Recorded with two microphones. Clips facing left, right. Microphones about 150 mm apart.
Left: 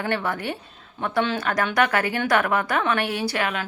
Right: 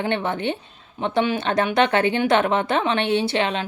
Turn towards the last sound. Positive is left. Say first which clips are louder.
# right 4 dB
turn(degrees=-25)  # may be behind; listen again after turning